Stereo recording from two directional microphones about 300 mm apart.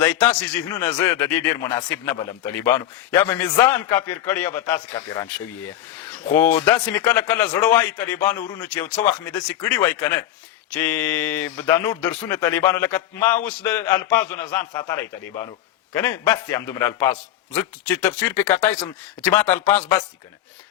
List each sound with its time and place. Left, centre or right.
0.0 s speech: centre
6.3 s speech: centre
16.0 s speech: centre
18.5 s speech: centre
19.2 s speech: centre